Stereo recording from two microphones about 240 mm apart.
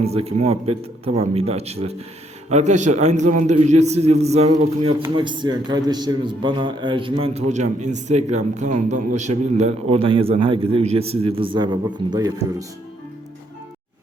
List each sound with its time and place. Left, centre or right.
0.0 s a man's voice: right